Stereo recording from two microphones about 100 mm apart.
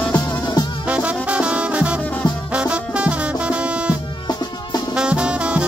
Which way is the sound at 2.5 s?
10° right (ahead or behind).